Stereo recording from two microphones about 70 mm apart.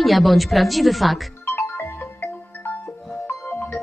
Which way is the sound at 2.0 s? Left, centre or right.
Left.